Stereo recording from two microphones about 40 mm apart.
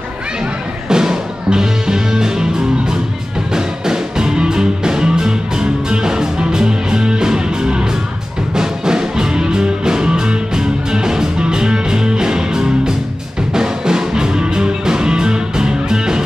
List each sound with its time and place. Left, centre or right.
0.8 s music: centre
3.5 s music: centre